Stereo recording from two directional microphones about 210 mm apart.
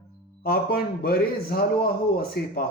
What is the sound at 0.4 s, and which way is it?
A man's voice, 45° left (ahead or behind).